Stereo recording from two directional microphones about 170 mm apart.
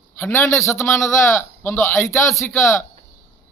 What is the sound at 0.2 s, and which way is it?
A man's voice, 15° left (ahead or behind).